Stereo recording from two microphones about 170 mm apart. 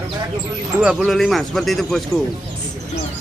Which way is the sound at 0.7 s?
Centre (ahead or behind).